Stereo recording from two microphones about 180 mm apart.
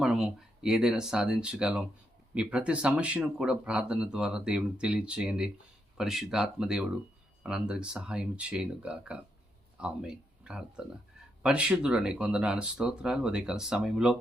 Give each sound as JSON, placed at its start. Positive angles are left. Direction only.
{"t": 0.0, "sound": "speech", "side_deg": -5}